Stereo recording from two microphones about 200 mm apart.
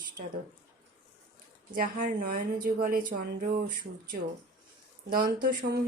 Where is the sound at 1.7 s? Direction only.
45° right (ahead or behind).